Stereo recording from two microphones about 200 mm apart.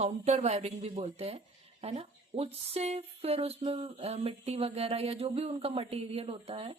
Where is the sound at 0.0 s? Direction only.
35° right (ahead or behind).